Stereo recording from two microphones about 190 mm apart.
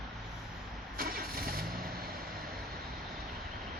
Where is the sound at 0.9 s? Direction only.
50° right (ahead or behind).